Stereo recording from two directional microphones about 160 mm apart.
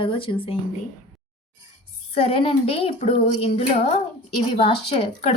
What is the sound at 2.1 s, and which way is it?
Speech, 35° left (ahead or behind).